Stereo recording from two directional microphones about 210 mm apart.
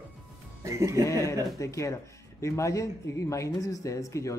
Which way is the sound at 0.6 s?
15° right (ahead or behind).